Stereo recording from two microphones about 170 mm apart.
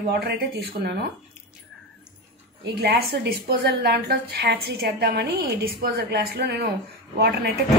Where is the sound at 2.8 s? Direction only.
70° right (ahead or behind).